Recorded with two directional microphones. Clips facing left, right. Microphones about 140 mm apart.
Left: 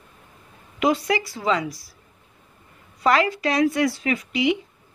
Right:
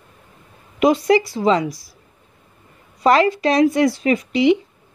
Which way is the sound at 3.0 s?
25° right (ahead or behind).